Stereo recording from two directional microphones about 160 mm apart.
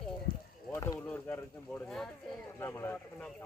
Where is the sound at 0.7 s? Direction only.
20° left (ahead or behind).